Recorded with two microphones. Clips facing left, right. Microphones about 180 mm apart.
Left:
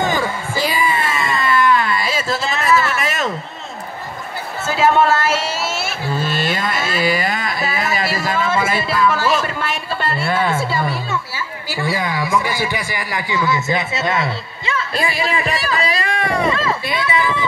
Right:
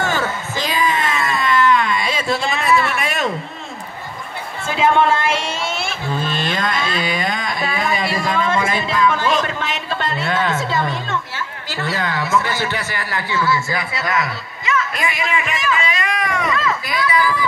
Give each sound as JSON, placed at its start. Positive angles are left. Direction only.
{"t": 0.0, "sound": "music", "side_deg": 15}
{"t": 1.3, "sound": "a sound", "side_deg": 5}
{"t": 4.6, "sound": "speech", "side_deg": 5}